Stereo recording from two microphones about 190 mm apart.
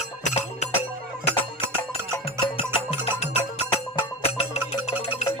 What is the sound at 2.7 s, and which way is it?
Music, 30° left (ahead or behind).